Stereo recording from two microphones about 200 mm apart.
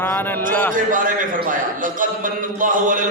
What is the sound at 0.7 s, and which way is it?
A man's voice, 40° right (ahead or behind).